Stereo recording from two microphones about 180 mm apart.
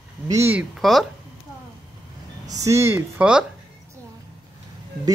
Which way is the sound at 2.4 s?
20° right (ahead or behind).